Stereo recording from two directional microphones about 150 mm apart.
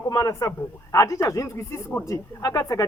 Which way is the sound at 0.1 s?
25° left (ahead or behind).